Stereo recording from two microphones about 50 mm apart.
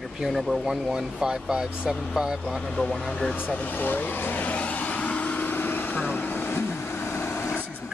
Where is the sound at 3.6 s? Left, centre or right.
Left.